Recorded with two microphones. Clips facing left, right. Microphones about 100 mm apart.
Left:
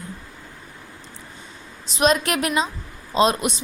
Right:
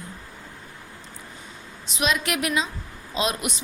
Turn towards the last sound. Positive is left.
turn(degrees=35)  # may be behind; listen again after turning